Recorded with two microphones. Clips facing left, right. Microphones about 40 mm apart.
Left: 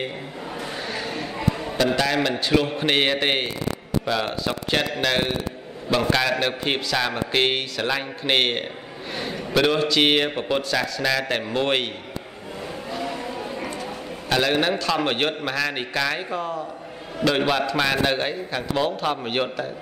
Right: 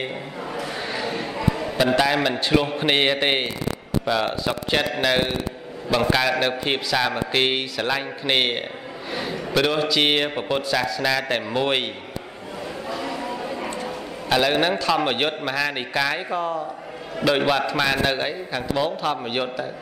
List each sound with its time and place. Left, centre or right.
0.8 s a sound: centre
1.8 s a man's voice: centre
14.3 s a man's voice: centre